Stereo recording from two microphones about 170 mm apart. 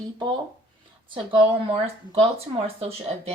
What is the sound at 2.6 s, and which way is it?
Speech, 35° right (ahead or behind).